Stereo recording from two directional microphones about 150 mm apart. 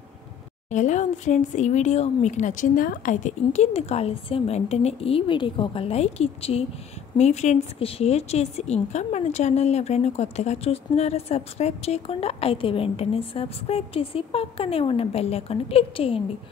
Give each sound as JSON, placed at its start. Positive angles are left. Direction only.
{"t": 0.7, "sound": "a woman's voice", "side_deg": 55}